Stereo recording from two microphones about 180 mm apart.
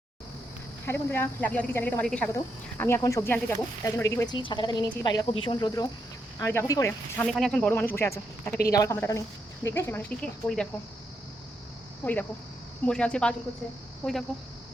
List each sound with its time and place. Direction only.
0.9 s a woman's voice: 10° left (ahead or behind)
7.3 s speech: centre (ahead or behind)
12.0 s speech: 10° left (ahead or behind)